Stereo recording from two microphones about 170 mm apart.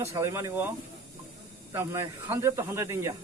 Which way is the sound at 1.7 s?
15° right (ahead or behind).